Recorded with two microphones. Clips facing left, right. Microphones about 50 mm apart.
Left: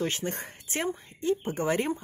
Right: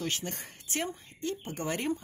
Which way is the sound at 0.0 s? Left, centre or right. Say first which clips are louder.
Left 5 dB; left.